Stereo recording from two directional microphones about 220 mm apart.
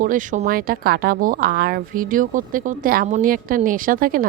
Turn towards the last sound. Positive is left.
turn(degrees=-40)  # may be behind; listen again after turning